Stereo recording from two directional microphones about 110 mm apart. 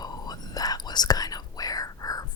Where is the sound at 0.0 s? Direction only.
35° left (ahead or behind).